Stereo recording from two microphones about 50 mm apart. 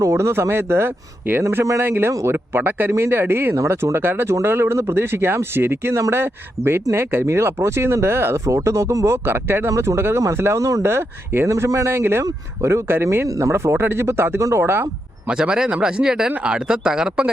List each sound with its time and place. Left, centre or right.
0.1 s speech: right
4.3 s speech: right
5.9 s speech: right
8.4 s speech: right
9.1 s speech: right
9.6 s speech: right
11.4 s speech: right
13.4 s speech: right
13.7 s speech: right
15.3 s speech: centre